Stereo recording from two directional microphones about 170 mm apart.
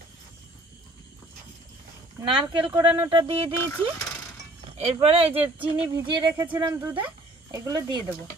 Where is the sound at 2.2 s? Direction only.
30° right (ahead or behind).